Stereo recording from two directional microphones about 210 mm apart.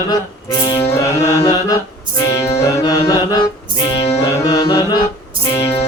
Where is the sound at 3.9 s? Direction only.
30° left (ahead or behind).